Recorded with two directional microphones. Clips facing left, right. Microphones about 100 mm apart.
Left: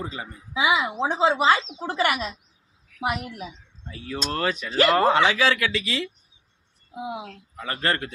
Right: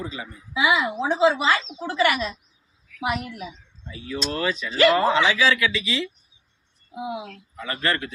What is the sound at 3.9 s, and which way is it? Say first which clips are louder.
Speech: right 1 dB; 50° left (ahead or behind).